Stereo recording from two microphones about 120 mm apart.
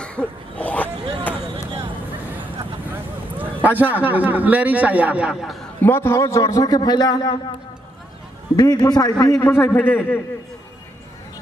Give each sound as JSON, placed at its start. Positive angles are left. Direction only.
{"t": 0.0, "sound": "a sound", "side_deg": 10}
{"t": 3.3, "sound": "a man's voice", "side_deg": -15}
{"t": 5.8, "sound": "a man's voice", "side_deg": 20}
{"t": 8.5, "sound": "a man's voice", "side_deg": 35}